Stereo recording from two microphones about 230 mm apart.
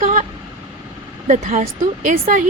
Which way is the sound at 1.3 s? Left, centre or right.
Right.